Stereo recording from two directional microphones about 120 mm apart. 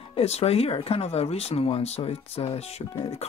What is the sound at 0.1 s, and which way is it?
Speech, 60° left (ahead or behind).